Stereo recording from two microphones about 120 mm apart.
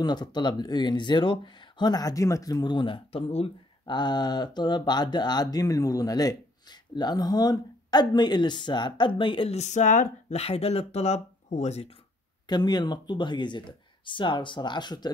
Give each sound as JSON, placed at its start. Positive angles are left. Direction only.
{"t": 0.0, "sound": "speech", "side_deg": 35}
{"t": 3.8, "sound": "speech", "side_deg": 40}
{"t": 9.6, "sound": "speech", "side_deg": 85}
{"t": 12.4, "sound": "speech", "side_deg": 35}